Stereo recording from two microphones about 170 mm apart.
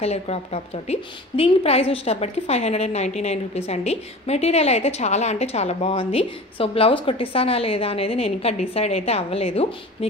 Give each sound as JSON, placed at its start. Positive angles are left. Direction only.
{"t": 0.0, "sound": "a woman's voice", "side_deg": 35}